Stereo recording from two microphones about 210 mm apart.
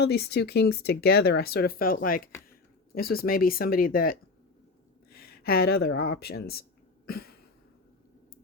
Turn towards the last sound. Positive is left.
turn(degrees=45)  # may be behind; listen again after turning